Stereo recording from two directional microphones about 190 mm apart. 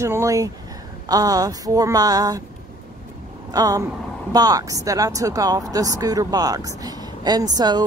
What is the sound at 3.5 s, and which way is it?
Speech, 20° right (ahead or behind).